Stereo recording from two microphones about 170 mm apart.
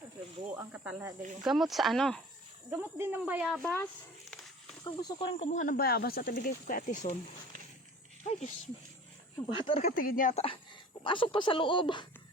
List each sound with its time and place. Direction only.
0.5 s speech: 10° right (ahead or behind)
2.6 s speech: 10° right (ahead or behind)
4.8 s speech: 25° left (ahead or behind)
5.4 s speech: 45° left (ahead or behind)
5.7 s speech: 65° left (ahead or behind); by 7.1 s 50° left (ahead or behind)
8.3 s speech: 40° left (ahead or behind)
9.6 s speech: 35° left (ahead or behind)
9.9 s speech: 55° left (ahead or behind)
10.3 s speech: 35° left (ahead or behind)